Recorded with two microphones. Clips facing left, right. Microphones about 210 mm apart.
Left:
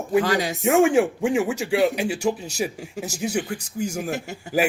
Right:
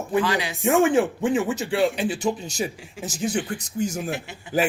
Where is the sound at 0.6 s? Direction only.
15° left (ahead or behind).